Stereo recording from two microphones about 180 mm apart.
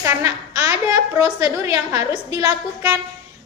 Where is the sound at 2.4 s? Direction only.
20° right (ahead or behind).